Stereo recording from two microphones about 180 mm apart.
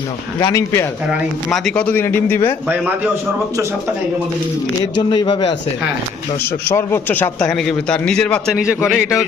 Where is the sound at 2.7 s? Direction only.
10° right (ahead or behind).